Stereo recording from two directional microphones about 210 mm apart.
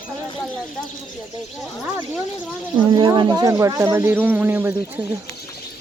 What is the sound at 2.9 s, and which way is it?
Speech, 20° right (ahead or behind).